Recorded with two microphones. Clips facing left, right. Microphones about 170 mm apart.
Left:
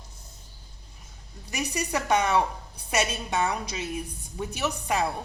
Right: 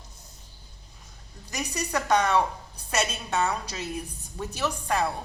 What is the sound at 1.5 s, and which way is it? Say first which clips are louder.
A woman's voice: left 1 dB; 10° left (ahead or behind).